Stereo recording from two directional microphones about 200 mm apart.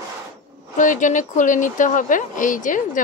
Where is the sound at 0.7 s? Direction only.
40° left (ahead or behind).